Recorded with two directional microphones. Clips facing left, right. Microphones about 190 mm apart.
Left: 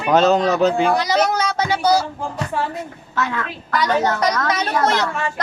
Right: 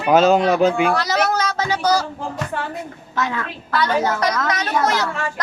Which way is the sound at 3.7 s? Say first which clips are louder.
Left 1 dB; 15° left (ahead or behind).